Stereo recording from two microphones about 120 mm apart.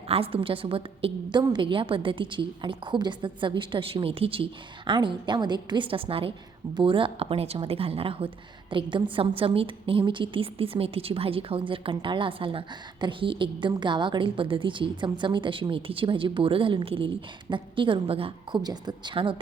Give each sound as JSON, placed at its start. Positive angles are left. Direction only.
{"t": 0.1, "sound": "a woman's voice", "side_deg": -55}
{"t": 18.6, "sound": "a woman's voice", "side_deg": -35}